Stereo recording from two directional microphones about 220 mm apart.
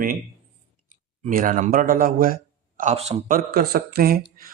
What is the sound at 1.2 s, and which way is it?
Speech, 40° right (ahead or behind).